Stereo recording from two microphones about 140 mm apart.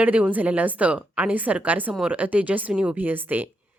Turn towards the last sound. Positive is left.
turn(degrees=-15)  # may be behind; listen again after turning